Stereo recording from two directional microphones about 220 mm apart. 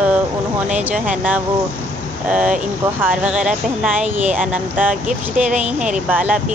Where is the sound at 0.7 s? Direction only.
5° right (ahead or behind).